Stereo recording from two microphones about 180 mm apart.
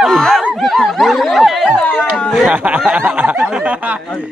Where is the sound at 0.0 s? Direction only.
Centre (ahead or behind).